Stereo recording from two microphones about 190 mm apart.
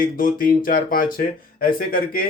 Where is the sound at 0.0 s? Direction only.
50° left (ahead or behind).